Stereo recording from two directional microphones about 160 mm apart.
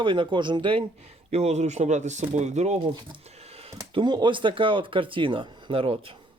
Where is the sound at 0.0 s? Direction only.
30° right (ahead or behind).